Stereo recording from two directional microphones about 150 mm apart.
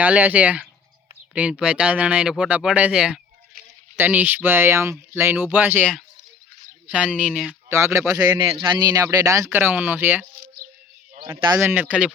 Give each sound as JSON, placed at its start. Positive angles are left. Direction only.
{"t": 0.0, "sound": "speech", "side_deg": -10}
{"t": 6.8, "sound": "speech", "side_deg": -10}
{"t": 7.1, "sound": "speech", "side_deg": 5}
{"t": 7.7, "sound": "speech", "side_deg": -20}
{"t": 10.2, "sound": "a sound", "side_deg": -65}
{"t": 11.3, "sound": "speech", "side_deg": -25}
{"t": 11.6, "sound": "speech", "side_deg": -10}